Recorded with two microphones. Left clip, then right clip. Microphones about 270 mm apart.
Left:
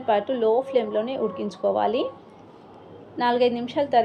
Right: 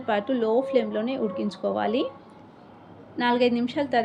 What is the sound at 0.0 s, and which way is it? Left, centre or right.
A woman's voice, centre.